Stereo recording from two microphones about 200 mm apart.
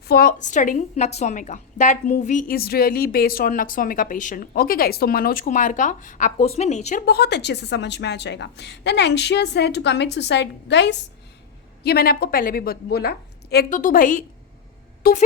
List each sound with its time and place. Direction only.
0.1 s a woman's voice: 45° left (ahead or behind)
7.0 s a woman's voice: 55° left (ahead or behind)